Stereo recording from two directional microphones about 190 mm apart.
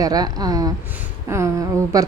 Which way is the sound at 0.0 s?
20° right (ahead or behind).